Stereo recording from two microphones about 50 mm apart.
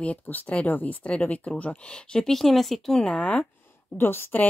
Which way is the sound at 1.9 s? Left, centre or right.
Centre.